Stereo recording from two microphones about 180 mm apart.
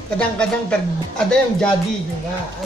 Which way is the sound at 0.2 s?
5° left (ahead or behind).